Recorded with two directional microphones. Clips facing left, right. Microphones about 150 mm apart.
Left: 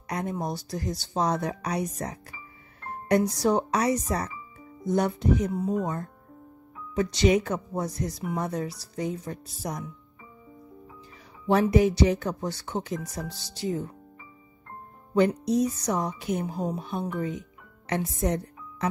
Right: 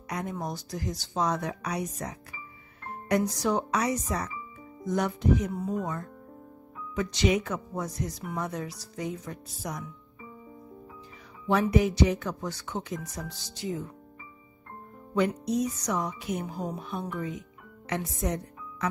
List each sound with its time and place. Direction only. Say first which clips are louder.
0.1 s speech: left 3 dB; 35° left (ahead or behind)
11.5 s speech: left 3 dB; 30° left (ahead or behind)
15.1 s speech: left 4 dB; 30° left (ahead or behind)